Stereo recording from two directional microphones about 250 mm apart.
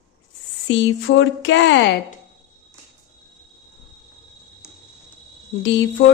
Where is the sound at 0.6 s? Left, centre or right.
Left.